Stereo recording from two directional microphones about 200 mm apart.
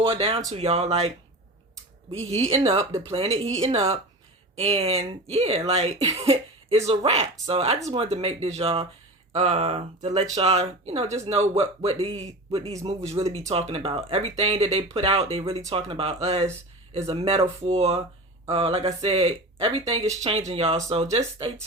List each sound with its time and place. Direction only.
0.0 s speech: 30° right (ahead or behind)